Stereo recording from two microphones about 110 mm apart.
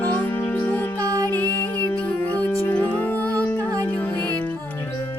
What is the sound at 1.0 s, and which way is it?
Music, 35° right (ahead or behind).